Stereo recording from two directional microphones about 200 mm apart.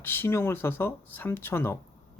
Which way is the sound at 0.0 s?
10° left (ahead or behind).